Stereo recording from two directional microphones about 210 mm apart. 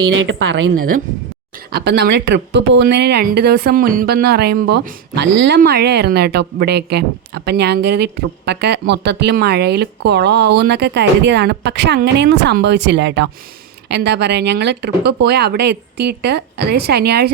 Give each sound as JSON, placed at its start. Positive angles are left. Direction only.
{"t": 0.1, "sound": "a woman's voice", "side_deg": -65}
{"t": 1.7, "sound": "speech", "side_deg": -50}